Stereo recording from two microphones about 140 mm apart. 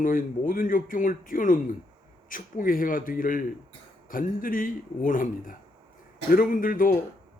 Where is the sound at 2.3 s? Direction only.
85° left.